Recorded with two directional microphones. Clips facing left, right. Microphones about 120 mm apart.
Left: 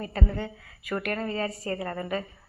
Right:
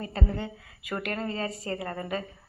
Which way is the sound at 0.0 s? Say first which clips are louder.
Left 1 dB; 25° right (ahead or behind).